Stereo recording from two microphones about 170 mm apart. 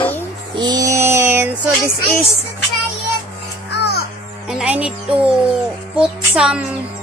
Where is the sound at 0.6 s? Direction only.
20° right (ahead or behind).